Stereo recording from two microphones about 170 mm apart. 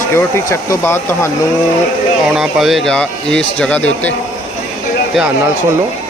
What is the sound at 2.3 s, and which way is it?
Speech, centre (ahead or behind).